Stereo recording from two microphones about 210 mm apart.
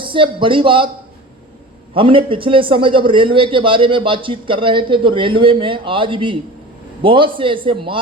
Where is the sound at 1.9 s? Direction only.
25° right (ahead or behind).